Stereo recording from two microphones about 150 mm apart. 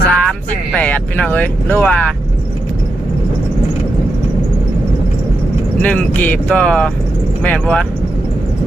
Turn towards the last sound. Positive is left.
turn(degrees=10)  # may be behind; listen again after turning